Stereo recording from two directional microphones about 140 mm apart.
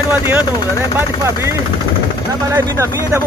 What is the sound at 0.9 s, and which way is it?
Speech, 20° right (ahead or behind).